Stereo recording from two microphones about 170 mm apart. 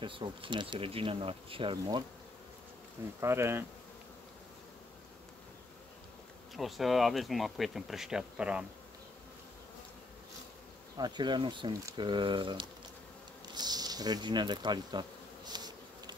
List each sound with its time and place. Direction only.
0.0 s speech: 30° right (ahead or behind)
3.2 s speech: 15° right (ahead or behind)
6.5 s speech: centre (ahead or behind)
11.0 s speech: 25° right (ahead or behind)
13.6 s insect: 25° right (ahead or behind)